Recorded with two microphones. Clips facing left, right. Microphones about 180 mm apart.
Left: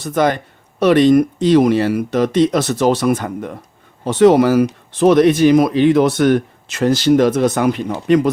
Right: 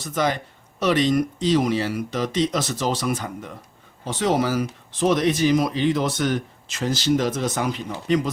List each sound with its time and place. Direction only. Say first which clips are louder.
0.0 s speech: left 7 dB; 55° left (ahead or behind)